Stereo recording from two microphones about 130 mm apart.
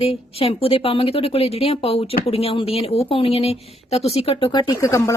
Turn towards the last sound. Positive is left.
turn(degrees=25)  # may be behind; listen again after turning